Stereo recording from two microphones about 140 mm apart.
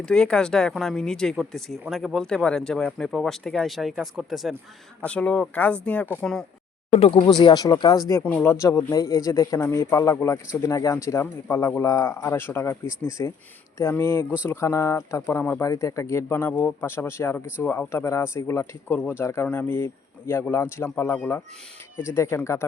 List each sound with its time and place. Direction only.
0.0 s speech: 5° left (ahead or behind)
6.9 s speech: 40° left (ahead or behind)
7.3 s speech: 30° left (ahead or behind)